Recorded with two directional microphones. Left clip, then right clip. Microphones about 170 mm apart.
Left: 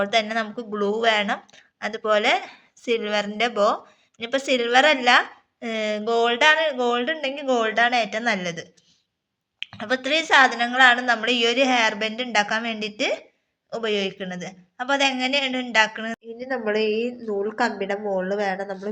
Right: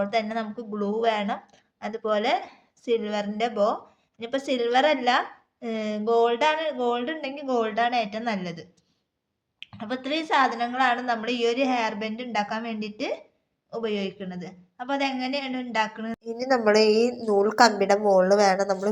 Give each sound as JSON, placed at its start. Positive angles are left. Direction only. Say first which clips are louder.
{"t": 0.0, "sound": "speech", "louder": "left 4 dB", "side_deg": 0}
{"t": 16.2, "sound": "a woman's voice", "louder": "right 7 dB", "side_deg": -30}